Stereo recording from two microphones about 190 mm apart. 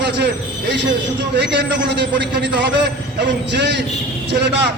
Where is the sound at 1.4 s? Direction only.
65° right (ahead or behind).